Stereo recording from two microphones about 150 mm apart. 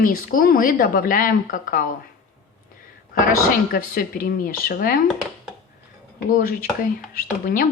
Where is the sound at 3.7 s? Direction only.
75° left (ahead or behind).